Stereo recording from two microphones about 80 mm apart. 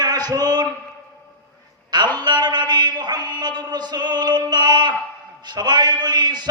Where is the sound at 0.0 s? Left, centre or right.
Right.